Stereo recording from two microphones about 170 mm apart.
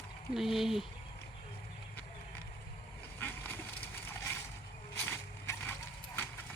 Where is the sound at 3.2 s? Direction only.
10° left (ahead or behind).